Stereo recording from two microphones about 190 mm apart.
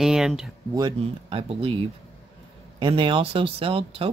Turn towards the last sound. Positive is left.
turn(degrees=-30)  # may be behind; listen again after turning